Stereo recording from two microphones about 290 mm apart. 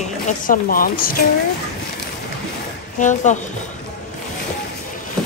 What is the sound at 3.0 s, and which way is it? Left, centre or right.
Speech, left.